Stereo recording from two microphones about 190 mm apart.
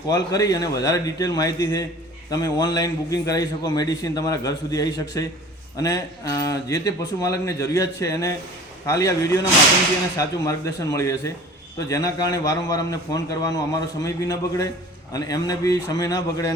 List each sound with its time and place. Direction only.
0.1 s a man's voice: 20° left (ahead or behind)